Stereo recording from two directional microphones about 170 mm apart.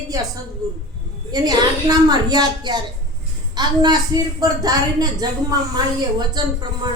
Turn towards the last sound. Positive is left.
turn(degrees=-25)  # may be behind; listen again after turning